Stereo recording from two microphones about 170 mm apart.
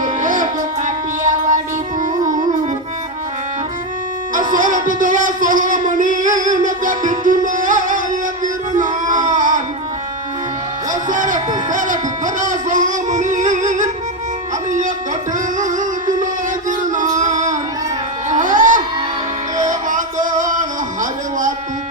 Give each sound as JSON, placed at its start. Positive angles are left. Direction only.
{"t": 0.0, "sound": "music", "side_deg": -50}
{"t": 4.4, "sound": "a sound", "side_deg": -50}
{"t": 8.7, "sound": "music", "side_deg": -50}
{"t": 11.1, "sound": "a sound", "side_deg": -50}
{"t": 14.7, "sound": "music", "side_deg": -50}
{"t": 18.3, "sound": "baby cry", "side_deg": -50}
{"t": 19.5, "sound": "music", "side_deg": -50}